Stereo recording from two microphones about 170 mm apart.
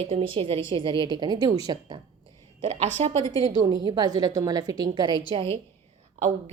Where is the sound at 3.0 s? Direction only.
40° right (ahead or behind).